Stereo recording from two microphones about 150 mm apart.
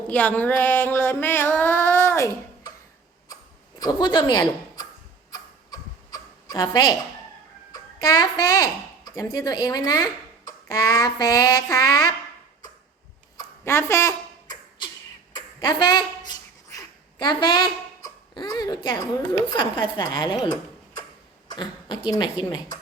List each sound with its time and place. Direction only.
0.1 s child singing: 10° left (ahead or behind)
3.8 s a woman's voice: 25° left (ahead or behind)
5.3 s tick-tock: 25° left (ahead or behind)
7.7 s speech: 25° left (ahead or behind)
13.3 s a sound: 20° left (ahead or behind)
15.4 s speech: 30° left (ahead or behind)